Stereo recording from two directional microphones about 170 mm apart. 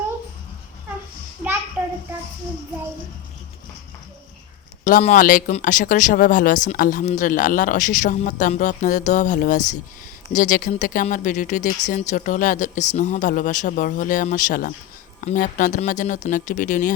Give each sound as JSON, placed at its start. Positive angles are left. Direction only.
{"t": 4.8, "sound": "speech", "side_deg": 50}